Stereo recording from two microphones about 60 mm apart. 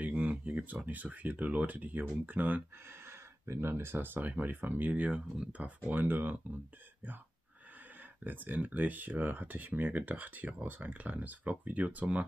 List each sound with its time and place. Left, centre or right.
0.0 s speech: right
3.1 s speech: right
5.9 s speech: right
8.2 s speech: right